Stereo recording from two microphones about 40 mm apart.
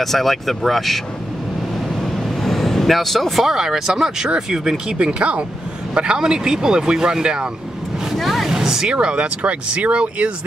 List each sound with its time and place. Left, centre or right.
0.0 s speech: centre
2.1 s vehicle: centre
3.5 s speech: centre
4.9 s speech: right
8.1 s speech: centre
8.9 s speech: right